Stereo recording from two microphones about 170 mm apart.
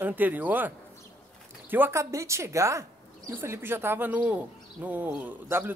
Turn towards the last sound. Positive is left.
turn(degrees=-15)  # may be behind; listen again after turning